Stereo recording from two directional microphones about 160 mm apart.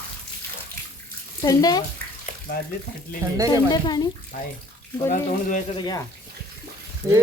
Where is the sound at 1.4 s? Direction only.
25° left (ahead or behind).